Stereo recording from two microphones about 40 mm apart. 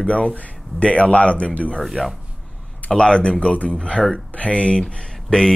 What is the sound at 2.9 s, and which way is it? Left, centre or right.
Speech, left.